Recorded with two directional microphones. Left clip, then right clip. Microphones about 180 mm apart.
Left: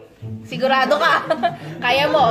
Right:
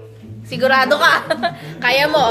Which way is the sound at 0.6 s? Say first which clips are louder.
Right 3 dB; 15° right (ahead or behind).